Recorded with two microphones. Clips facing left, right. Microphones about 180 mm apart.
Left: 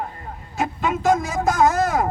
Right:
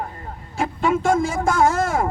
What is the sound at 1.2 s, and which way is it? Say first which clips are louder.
Speech: even; 30° right (ahead or behind).